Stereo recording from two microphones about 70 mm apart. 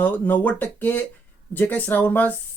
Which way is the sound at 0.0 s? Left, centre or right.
Left.